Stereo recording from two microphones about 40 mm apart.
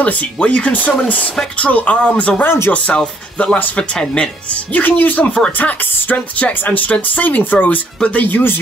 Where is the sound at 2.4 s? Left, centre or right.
Left.